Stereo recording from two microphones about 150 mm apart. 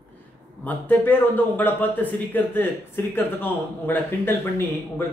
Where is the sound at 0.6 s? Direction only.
10° left (ahead or behind).